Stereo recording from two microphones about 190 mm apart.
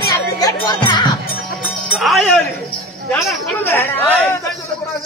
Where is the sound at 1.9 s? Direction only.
Centre (ahead or behind).